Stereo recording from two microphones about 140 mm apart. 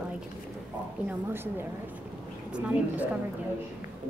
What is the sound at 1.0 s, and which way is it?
A woman's voice, 15° right (ahead or behind).